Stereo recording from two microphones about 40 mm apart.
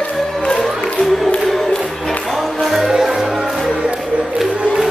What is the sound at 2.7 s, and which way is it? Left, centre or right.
Music, centre.